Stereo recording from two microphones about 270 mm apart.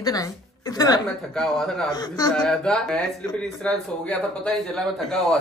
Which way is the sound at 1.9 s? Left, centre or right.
Centre.